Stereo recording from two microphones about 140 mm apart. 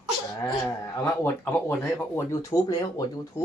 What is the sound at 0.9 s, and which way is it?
Speech, 15° left (ahead or behind).